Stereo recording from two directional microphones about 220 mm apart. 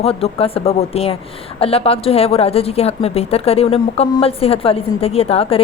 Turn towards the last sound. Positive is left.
turn(degrees=25)  # may be behind; listen again after turning